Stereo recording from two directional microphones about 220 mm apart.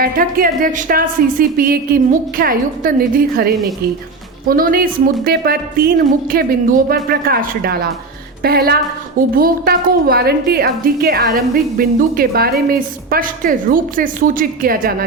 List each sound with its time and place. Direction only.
0.0 s a woman's voice: 40° right (ahead or behind)